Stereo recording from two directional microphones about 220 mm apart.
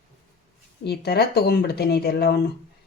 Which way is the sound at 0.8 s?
45° left (ahead or behind).